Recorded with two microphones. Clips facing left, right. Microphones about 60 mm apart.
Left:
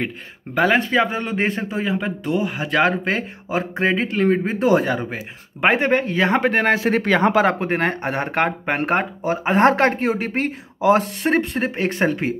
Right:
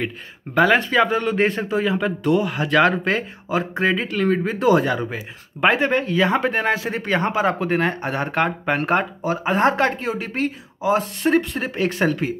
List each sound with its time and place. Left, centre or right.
0.6 s speech: left
3.8 s speech: left
7.4 s speech: left
9.4 s speech: left